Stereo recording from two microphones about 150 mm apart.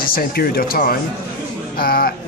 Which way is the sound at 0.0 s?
85° left.